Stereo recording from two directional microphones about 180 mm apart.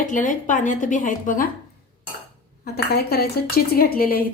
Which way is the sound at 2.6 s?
60° left (ahead or behind).